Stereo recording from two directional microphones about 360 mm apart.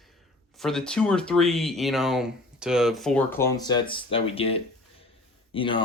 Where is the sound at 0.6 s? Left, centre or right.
Centre.